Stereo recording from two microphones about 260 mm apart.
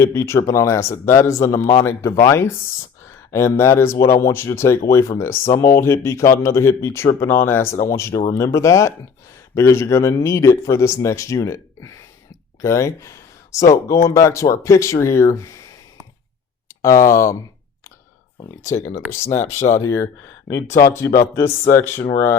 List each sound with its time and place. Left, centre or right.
0.0 s speech: centre
16.8 s speech: centre
18.3 s speech: centre
19.5 s speech: left
19.8 s speech: centre